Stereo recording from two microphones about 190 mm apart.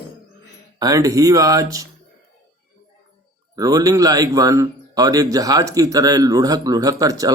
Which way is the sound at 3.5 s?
20° right (ahead or behind).